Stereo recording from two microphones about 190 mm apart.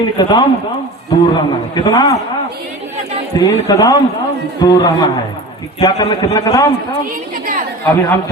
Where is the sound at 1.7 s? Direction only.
25° left (ahead or behind).